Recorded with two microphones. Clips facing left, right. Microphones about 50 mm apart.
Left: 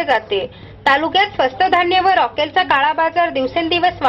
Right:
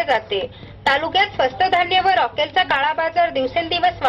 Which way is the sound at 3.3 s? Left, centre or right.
Left.